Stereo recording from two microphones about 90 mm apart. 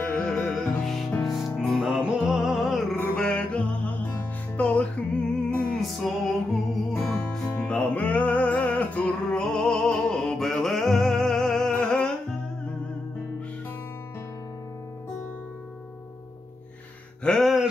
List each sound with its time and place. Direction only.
0.0 s music: 10° left (ahead or behind)
7.6 s music: 15° left (ahead or behind)
17.2 s a sound: 5° left (ahead or behind)